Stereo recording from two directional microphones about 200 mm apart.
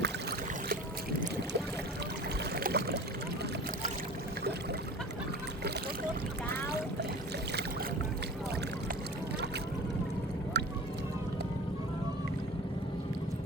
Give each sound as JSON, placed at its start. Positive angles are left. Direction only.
{"t": 2.6, "sound": "boat", "side_deg": -55}
{"t": 10.5, "sound": "vehicle", "side_deg": -60}